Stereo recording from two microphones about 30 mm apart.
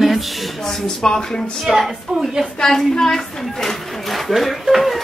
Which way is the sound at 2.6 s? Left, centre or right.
Centre.